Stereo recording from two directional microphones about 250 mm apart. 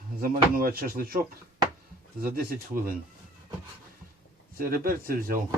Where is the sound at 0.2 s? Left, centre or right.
Right.